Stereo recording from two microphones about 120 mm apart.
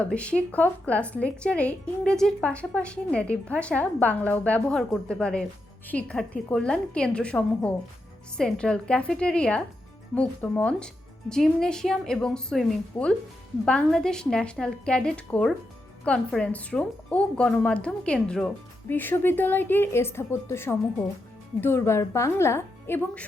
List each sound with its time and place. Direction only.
0.0 s a woman's voice: 10° left (ahead or behind)